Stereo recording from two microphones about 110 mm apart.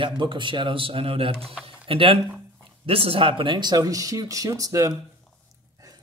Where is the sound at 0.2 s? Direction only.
50° right (ahead or behind).